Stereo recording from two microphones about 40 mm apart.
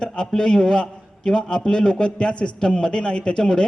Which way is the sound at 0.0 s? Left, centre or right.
Centre.